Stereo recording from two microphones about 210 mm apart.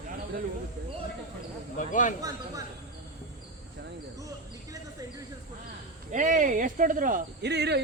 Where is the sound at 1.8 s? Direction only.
40° left (ahead or behind).